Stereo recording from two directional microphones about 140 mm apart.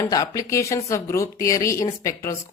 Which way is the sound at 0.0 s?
25° left (ahead or behind).